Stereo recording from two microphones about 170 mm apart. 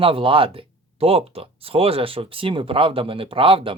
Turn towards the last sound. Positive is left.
turn(degrees=-30)  # may be behind; listen again after turning